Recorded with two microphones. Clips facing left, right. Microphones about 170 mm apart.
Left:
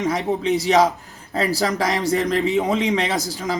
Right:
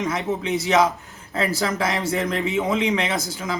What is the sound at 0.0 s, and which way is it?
Speech, 35° left (ahead or behind).